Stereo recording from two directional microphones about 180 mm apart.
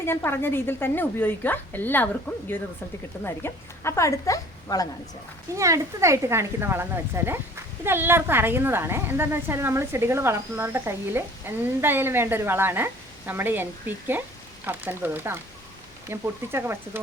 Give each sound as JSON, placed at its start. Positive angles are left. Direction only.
{"t": 0.0, "sound": "a woman's voice", "side_deg": 10}
{"t": 5.5, "sound": "a woman's voice", "side_deg": -15}